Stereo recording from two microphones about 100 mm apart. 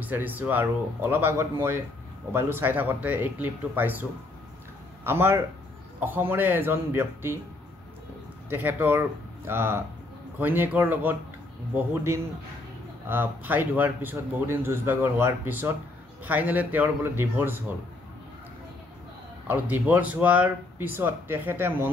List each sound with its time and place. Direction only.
0.0 s speech: 20° right (ahead or behind)
8.5 s speech: 20° right (ahead or behind)
19.4 s speech: 15° right (ahead or behind)